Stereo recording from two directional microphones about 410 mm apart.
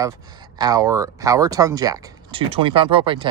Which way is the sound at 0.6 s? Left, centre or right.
Centre.